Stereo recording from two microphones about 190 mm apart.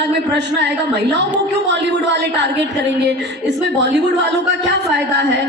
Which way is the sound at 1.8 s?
65° right (ahead or behind).